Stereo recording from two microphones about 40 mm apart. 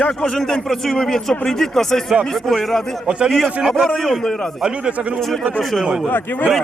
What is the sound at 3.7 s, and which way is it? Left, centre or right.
Speech, centre.